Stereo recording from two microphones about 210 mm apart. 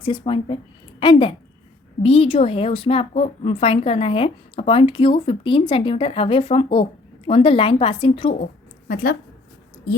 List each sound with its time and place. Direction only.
0.0 s a woman's voice: 25° left (ahead or behind)